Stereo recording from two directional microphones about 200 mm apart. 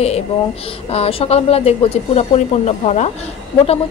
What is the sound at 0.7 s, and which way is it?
A woman's voice, 30° left (ahead or behind).